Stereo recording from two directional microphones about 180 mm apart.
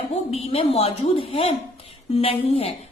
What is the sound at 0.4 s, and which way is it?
A woman's voice, 30° left (ahead or behind).